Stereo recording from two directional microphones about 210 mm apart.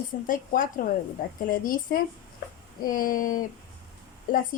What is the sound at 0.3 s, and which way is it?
Speech, 40° left (ahead or behind).